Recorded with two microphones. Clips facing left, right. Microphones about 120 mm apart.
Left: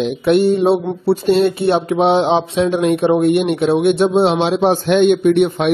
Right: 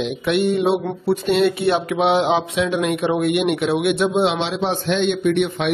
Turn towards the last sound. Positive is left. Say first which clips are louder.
# left 6 dB
turn(degrees=40)  # may be behind; listen again after turning